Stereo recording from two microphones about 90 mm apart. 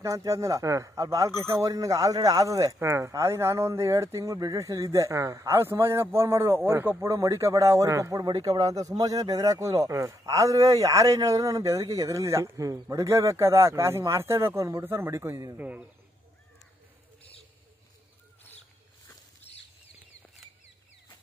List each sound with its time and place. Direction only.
0.0 s a man's voice: 35° right (ahead or behind)
7.1 s a man's voice: 35° right (ahead or behind)
15.5 s a man's voice: 15° right (ahead or behind)